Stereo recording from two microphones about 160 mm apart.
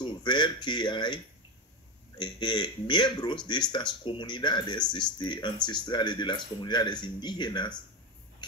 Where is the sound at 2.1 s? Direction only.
30° left (ahead or behind).